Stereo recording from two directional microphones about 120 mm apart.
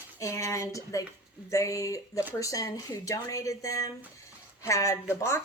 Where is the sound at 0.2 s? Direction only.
25° left (ahead or behind).